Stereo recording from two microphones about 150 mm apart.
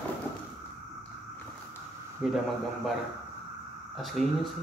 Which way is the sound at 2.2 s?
5° right (ahead or behind).